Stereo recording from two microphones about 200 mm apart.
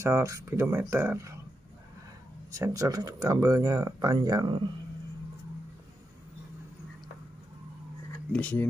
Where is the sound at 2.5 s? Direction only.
15° right (ahead or behind).